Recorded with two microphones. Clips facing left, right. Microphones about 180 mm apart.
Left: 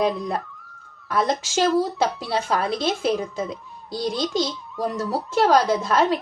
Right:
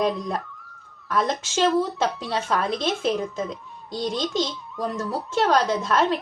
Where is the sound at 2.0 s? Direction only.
5° left (ahead or behind).